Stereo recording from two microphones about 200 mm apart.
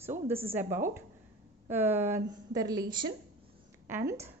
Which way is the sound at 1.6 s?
10° right (ahead or behind).